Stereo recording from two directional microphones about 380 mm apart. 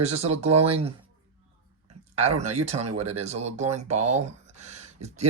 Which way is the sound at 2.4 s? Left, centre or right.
Centre.